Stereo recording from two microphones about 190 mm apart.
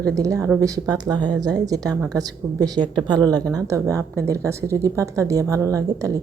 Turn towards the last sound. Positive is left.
turn(degrees=-15)  # may be behind; listen again after turning